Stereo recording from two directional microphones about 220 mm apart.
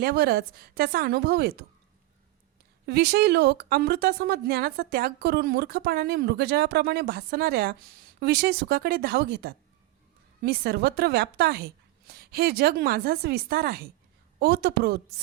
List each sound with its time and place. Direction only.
0.0 s a woman's voice: 45° right (ahead or behind)
2.8 s a woman's voice: 50° right (ahead or behind)